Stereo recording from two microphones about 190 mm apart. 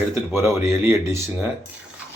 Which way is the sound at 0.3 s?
15° right (ahead or behind).